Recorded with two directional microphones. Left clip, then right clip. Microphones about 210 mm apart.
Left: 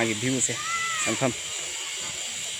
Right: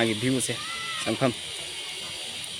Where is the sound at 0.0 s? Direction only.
5° right (ahead or behind).